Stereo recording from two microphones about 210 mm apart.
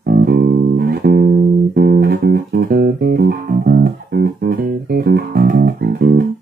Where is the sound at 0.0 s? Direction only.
45° right (ahead or behind).